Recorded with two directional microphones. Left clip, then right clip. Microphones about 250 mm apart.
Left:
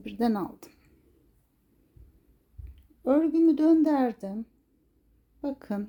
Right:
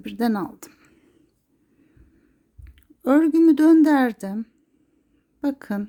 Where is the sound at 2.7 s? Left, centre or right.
Right.